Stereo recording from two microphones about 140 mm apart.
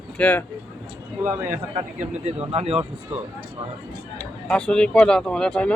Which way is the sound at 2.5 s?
50° right (ahead or behind).